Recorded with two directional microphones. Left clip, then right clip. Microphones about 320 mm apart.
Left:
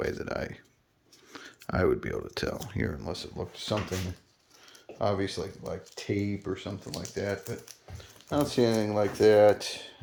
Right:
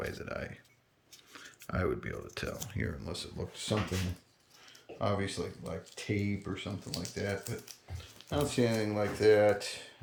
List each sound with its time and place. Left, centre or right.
0.0 s speech: centre